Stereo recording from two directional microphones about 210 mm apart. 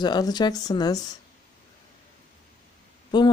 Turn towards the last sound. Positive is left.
turn(degrees=20)  # may be behind; listen again after turning